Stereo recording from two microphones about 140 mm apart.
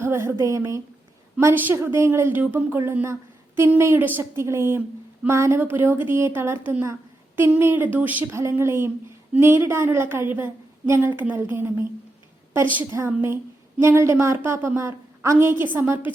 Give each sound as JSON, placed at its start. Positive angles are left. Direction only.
{"t": 0.0, "sound": "a woman's voice", "side_deg": -20}